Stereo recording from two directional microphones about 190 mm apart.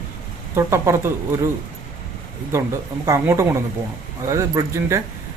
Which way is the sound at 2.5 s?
15° right (ahead or behind).